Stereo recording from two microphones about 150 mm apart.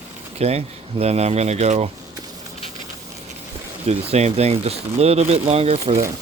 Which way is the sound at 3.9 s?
45° right (ahead or behind).